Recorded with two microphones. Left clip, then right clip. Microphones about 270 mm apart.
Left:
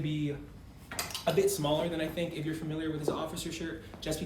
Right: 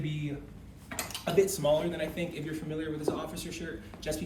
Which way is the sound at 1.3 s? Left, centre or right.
Centre.